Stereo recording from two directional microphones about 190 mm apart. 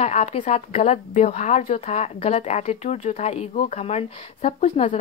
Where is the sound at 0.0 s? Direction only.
35° left (ahead or behind).